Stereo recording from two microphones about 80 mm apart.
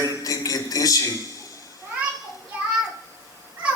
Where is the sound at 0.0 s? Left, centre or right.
Left.